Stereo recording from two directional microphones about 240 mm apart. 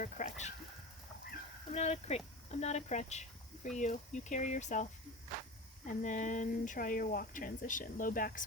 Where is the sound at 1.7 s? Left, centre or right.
Left.